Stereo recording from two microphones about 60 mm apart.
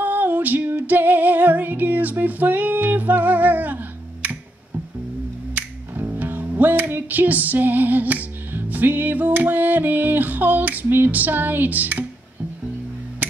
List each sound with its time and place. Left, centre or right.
0.0 s music: right
5.5 s music: right